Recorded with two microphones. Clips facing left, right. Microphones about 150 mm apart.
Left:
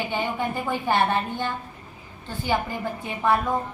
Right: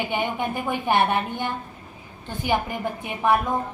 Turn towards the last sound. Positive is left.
turn(degrees=-15)  # may be behind; listen again after turning